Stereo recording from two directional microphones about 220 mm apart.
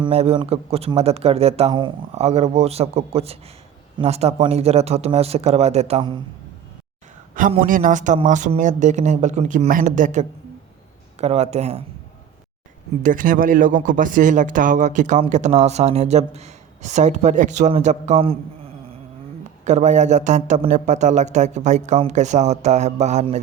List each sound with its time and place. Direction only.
0.0 s speech: 30° right (ahead or behind)
7.6 s speech: 35° right (ahead or behind)
13.0 s speech: 40° right (ahead or behind)
19.6 s speech: 35° right (ahead or behind)